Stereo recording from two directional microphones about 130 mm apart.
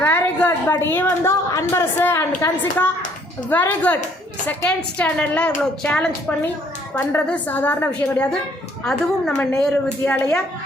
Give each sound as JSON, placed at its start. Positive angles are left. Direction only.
{"t": 0.0, "sound": "a sound", "side_deg": 15}
{"t": 0.9, "sound": "a woman's voice", "side_deg": 15}
{"t": 6.9, "sound": "a woman's voice", "side_deg": 20}